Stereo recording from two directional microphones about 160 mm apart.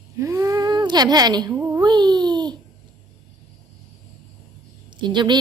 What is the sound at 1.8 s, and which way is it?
Speech, 25° right (ahead or behind).